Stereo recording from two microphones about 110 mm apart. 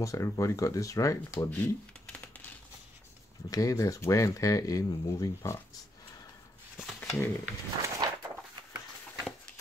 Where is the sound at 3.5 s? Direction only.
30° left (ahead or behind).